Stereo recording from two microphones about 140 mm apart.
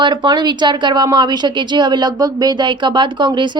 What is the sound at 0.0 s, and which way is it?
A woman's voice, 35° right (ahead or behind).